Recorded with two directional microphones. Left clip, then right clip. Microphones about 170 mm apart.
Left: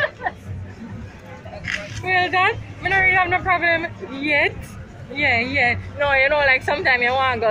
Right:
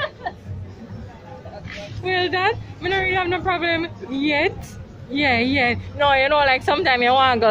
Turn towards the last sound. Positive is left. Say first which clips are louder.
# right 3 dB
turn(degrees=-55)  # may be behind; listen again after turning